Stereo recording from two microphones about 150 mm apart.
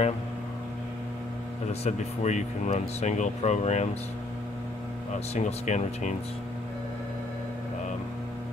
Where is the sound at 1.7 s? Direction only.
45° left (ahead or behind).